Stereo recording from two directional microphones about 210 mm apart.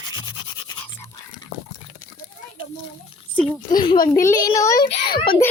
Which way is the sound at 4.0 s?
45° left (ahead or behind).